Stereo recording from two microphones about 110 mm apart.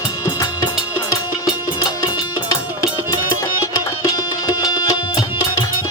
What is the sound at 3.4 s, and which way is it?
Music, 35° left (ahead or behind).